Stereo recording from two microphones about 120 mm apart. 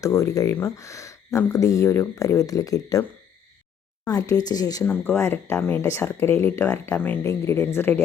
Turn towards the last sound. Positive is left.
turn(degrees=20)  # may be behind; listen again after turning